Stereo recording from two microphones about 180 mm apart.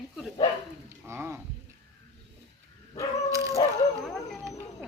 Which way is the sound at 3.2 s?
15° right (ahead or behind).